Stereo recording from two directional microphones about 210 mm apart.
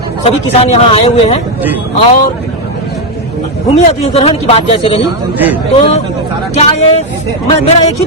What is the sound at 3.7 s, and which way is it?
Speech, 30° left (ahead or behind).